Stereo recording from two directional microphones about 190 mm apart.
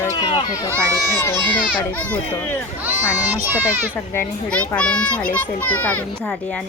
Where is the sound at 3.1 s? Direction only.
10° right (ahead or behind).